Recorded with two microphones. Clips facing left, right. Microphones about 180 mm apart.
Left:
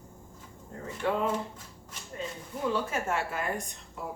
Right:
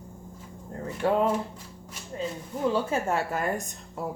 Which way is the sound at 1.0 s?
35° right (ahead or behind).